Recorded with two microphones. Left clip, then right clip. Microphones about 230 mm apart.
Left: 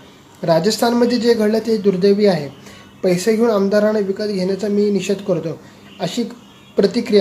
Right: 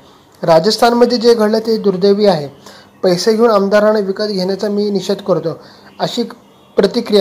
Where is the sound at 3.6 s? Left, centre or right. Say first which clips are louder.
Right 5 dB; centre.